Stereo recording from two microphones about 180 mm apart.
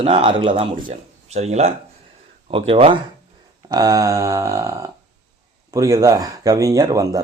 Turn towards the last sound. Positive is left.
turn(degrees=-20)  # may be behind; listen again after turning